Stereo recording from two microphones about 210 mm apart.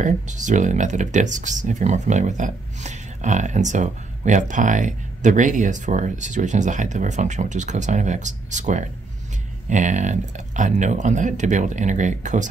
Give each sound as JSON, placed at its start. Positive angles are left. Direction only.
{"t": 0.0, "sound": "speech", "side_deg": -35}